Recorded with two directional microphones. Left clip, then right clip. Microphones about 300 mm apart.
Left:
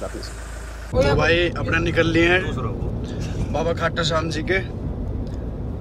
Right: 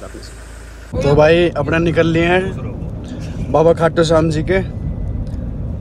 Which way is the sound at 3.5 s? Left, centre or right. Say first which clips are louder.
Right 11 dB; centre.